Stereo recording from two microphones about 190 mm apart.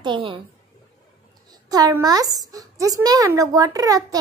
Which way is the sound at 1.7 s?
20° right (ahead or behind).